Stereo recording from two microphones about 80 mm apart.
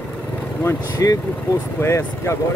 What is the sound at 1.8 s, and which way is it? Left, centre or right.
Speech, left.